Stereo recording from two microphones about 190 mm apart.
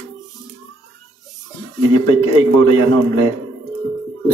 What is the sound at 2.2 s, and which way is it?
Speech, 30° left (ahead or behind).